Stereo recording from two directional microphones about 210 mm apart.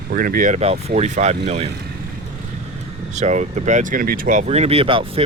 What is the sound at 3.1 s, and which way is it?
Speech, 35° right (ahead or behind).